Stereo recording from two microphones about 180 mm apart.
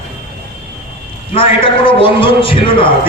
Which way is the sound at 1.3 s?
30° left (ahead or behind).